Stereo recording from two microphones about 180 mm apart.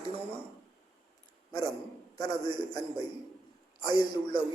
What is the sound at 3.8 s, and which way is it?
Speech, 25° left (ahead or behind).